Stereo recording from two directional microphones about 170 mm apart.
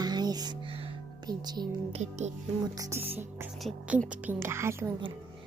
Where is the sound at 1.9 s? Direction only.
40° right (ahead or behind).